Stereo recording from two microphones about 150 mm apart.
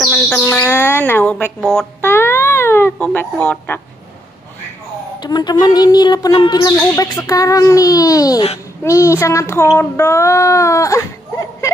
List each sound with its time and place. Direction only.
0.0 s bird: centre (ahead or behind)
0.5 s speech: 15° left (ahead or behind)
1.6 s speech: centre (ahead or behind)
2.0 s cat: 15° left (ahead or behind)
5.2 s speech: 30° left (ahead or behind)